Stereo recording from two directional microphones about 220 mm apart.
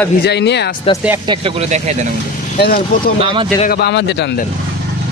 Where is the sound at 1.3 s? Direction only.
25° right (ahead or behind).